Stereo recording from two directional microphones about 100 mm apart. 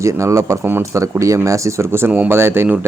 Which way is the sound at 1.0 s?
30° right (ahead or behind).